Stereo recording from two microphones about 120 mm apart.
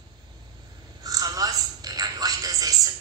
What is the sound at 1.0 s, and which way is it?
Telephone, 30° right (ahead or behind).